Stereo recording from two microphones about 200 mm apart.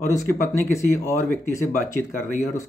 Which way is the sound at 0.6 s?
15° left (ahead or behind).